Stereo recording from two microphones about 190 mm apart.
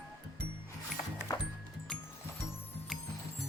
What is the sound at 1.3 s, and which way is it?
Music, 20° left (ahead or behind).